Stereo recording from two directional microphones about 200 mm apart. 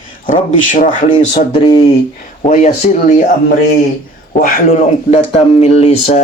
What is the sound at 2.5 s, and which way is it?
Speech, 40° left (ahead or behind).